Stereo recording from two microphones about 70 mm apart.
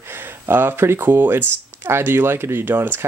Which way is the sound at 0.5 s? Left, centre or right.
Right.